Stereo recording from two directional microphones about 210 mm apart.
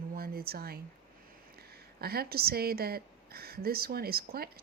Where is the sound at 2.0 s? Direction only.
45° right (ahead or behind).